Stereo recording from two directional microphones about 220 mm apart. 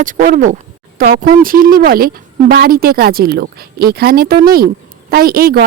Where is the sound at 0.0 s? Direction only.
40° right (ahead or behind).